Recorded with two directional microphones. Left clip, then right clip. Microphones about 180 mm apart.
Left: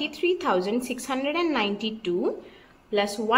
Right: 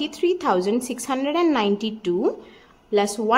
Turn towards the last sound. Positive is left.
turn(degrees=-35)  # may be behind; listen again after turning